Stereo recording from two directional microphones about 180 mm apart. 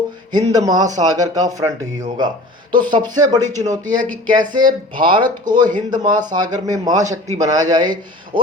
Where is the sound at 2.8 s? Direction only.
25° right (ahead or behind).